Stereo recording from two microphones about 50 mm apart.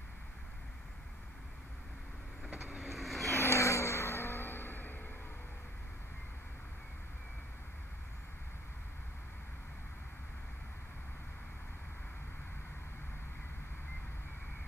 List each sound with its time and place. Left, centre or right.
2.6 s vehicle: centre
3.3 s vehicle: left